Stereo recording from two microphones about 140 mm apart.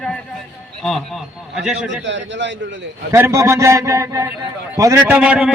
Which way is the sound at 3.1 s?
20° right (ahead or behind).